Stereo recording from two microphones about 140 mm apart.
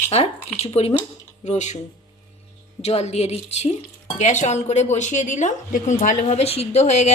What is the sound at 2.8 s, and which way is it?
A woman's voice, 50° left (ahead or behind).